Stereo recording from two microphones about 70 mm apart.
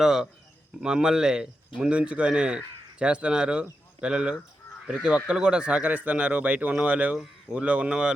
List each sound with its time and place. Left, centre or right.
0.0 s speech: centre